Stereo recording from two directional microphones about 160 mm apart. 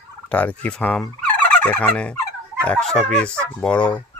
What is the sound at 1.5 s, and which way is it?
Turkey, 10° left (ahead or behind).